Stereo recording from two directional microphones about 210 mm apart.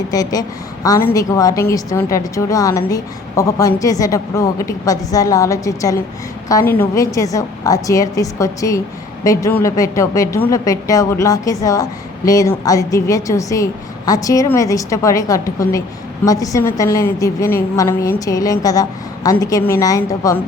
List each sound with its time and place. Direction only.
0.1 s a woman's voice: 15° left (ahead or behind)